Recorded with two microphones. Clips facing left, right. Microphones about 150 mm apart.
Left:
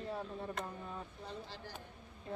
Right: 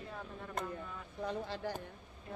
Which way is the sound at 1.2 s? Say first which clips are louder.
Right 8 dB; 60° right (ahead or behind).